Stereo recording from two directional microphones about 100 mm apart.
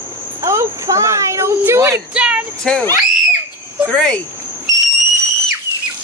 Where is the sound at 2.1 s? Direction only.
10° right (ahead or behind).